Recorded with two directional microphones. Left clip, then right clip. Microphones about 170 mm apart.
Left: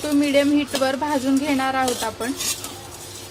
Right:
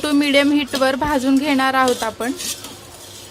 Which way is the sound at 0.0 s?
45° right (ahead or behind).